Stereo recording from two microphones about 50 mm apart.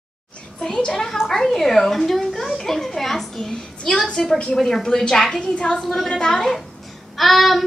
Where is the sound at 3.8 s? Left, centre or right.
Centre.